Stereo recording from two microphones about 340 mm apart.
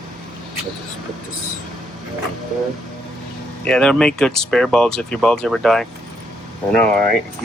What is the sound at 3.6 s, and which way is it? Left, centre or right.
Speech, centre.